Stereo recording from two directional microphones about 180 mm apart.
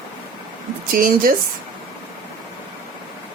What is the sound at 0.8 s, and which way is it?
Speech, 50° right (ahead or behind).